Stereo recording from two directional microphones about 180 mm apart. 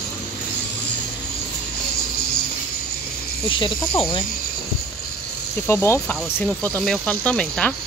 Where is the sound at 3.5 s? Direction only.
25° left (ahead or behind).